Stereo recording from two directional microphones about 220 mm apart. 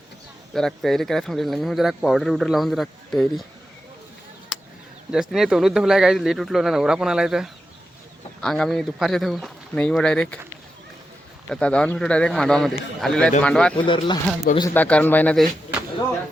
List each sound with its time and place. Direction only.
0.5 s speech: centre (ahead or behind)
4.5 s a sound: 5° right (ahead or behind)
5.1 s speech: centre (ahead or behind)
11.4 s speech: 5° left (ahead or behind)
13.7 s speech: 20° left (ahead or behind)
14.7 s speech: 5° left (ahead or behind)